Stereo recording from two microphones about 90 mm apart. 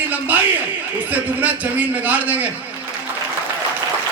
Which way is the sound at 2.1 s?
15° right (ahead or behind).